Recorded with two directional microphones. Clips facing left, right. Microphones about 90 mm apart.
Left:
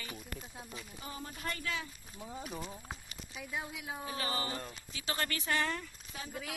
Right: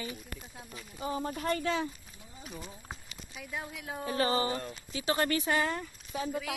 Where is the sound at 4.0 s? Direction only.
50° right (ahead or behind).